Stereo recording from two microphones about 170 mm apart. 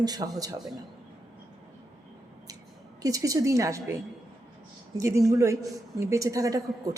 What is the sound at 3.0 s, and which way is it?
Speech, 20° right (ahead or behind).